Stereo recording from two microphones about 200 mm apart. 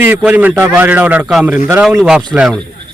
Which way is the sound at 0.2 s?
10° right (ahead or behind).